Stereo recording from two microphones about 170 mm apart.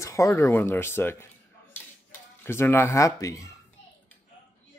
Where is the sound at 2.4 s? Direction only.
15° left (ahead or behind).